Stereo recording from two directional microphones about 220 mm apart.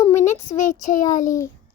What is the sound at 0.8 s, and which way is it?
Speech, 35° left (ahead or behind).